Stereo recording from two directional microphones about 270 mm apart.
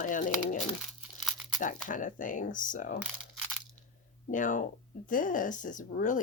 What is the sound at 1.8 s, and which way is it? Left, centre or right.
Speech, left.